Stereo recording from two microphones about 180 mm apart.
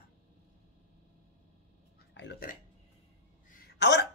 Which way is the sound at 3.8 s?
75° left (ahead or behind).